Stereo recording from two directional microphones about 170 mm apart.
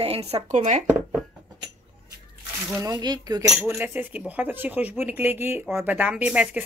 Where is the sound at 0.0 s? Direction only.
35° right (ahead or behind).